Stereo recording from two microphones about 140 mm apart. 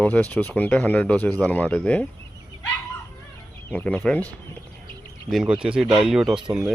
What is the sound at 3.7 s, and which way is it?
Speech, 10° left (ahead or behind).